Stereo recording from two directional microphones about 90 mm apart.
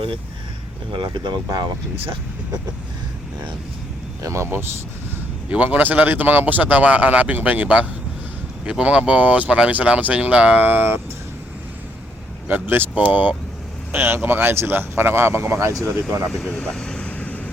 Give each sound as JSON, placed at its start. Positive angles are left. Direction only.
{"t": 0.9, "sound": "speech", "side_deg": -60}
{"t": 4.2, "sound": "speech", "side_deg": -35}
{"t": 5.5, "sound": "speech", "side_deg": -15}
{"t": 12.5, "sound": "speech", "side_deg": -20}
{"t": 16.3, "sound": "vehicle", "side_deg": 10}